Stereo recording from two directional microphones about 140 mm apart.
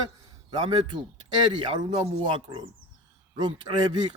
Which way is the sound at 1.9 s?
40° right (ahead or behind).